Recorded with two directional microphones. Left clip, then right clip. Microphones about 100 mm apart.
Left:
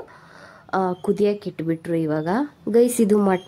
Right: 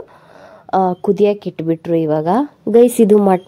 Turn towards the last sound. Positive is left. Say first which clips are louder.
# right 8 dB
turn(degrees=-25)  # may be behind; listen again after turning